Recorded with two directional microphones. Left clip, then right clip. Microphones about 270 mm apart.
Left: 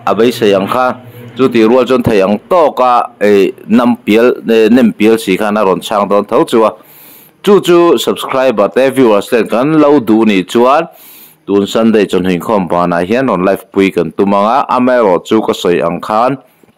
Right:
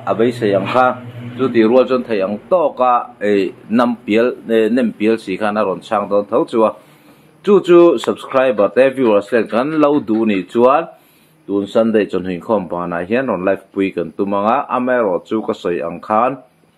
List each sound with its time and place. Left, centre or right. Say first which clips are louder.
0.0 s speech: left 6 dB; left